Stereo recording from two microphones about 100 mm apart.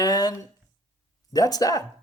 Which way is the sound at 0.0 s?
40° left (ahead or behind).